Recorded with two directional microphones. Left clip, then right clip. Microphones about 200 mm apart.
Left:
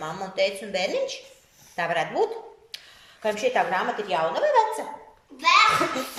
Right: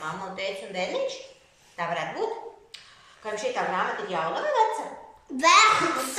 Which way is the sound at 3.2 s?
40° left (ahead or behind).